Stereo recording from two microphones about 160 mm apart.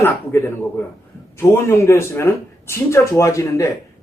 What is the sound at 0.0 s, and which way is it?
Speech, 15° left (ahead or behind).